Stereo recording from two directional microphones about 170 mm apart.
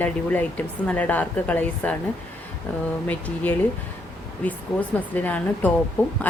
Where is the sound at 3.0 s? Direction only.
10° left (ahead or behind).